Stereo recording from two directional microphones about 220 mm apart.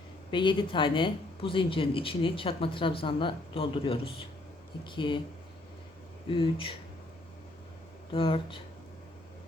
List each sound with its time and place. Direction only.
0.3 s speech: 20° left (ahead or behind)
6.2 s speech: 25° left (ahead or behind)
8.1 s speech: 25° left (ahead or behind)